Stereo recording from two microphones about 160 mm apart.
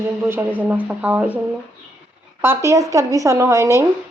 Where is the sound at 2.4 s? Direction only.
15° right (ahead or behind).